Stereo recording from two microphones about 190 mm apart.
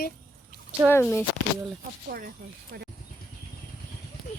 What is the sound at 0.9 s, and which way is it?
Speech, 10° left (ahead or behind).